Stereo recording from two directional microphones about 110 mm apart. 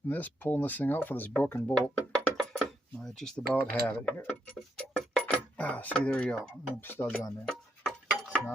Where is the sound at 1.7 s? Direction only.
10° left (ahead or behind).